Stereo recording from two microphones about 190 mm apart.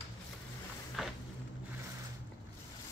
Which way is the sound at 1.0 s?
Centre (ahead or behind).